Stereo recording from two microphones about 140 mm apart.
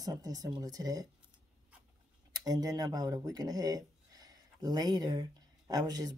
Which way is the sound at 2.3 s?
25° right (ahead or behind).